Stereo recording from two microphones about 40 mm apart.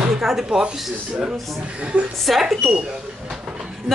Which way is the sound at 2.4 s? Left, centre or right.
Centre.